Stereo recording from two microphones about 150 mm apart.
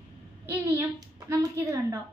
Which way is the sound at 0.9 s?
20° right (ahead or behind).